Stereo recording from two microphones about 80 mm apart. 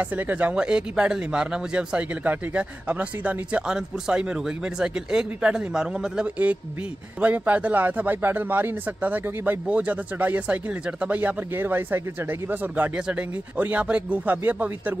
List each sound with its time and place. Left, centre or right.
0.0 s a man's voice: right